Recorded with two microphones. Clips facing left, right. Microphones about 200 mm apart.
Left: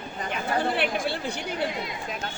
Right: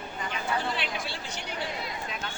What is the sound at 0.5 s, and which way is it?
Chatter, 55° left (ahead or behind).